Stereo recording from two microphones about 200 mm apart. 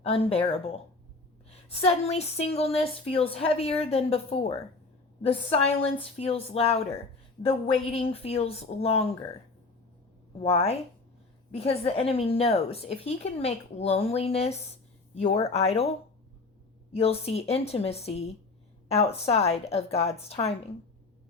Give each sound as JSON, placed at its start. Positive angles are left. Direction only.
{"t": 0.0, "sound": "a woman's voice", "side_deg": 30}
{"t": 7.9, "sound": "a woman's voice", "side_deg": 30}
{"t": 10.4, "sound": "a woman's voice", "side_deg": 30}
{"t": 17.0, "sound": "a woman's voice", "side_deg": 30}